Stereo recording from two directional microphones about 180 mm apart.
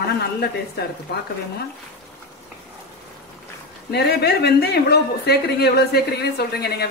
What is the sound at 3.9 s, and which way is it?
Speech, 65° left (ahead or behind).